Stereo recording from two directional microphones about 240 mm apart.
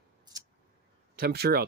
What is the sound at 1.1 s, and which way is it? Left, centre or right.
Speech, right.